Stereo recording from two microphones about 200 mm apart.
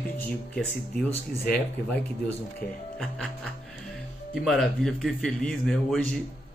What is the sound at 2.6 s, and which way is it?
Speech, 50° left (ahead or behind).